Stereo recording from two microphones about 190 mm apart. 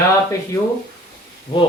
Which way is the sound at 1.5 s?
30° left (ahead or behind).